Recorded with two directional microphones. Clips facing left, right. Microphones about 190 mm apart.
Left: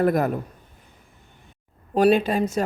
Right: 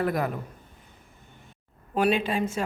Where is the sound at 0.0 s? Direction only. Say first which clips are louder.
Left 6 dB; 45° left (ahead or behind).